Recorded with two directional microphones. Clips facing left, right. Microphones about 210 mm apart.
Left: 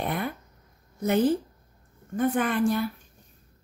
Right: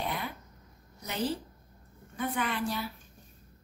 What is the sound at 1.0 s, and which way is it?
A woman's voice, 50° left (ahead or behind).